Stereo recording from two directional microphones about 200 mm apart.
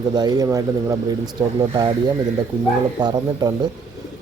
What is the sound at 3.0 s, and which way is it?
Speech, 20° right (ahead or behind).